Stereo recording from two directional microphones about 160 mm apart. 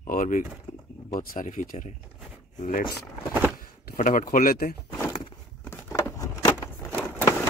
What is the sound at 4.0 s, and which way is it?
Speech, 60° left (ahead or behind).